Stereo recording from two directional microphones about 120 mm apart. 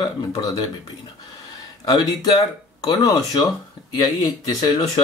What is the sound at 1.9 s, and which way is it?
Speech, 35° left (ahead or behind).